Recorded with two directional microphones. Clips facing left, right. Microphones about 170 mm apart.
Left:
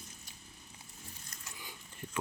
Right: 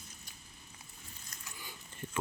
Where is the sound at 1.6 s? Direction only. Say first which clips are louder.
Right 2 dB; 20° left (ahead or behind).